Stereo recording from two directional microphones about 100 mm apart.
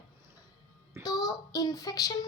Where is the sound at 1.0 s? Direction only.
40° left (ahead or behind).